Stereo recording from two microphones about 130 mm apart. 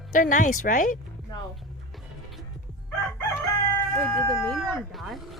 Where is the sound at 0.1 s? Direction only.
80° left.